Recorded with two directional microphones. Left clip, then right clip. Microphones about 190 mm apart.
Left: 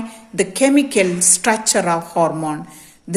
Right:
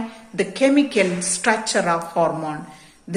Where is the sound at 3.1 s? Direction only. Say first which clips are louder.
Left 4 dB; 40° left (ahead or behind).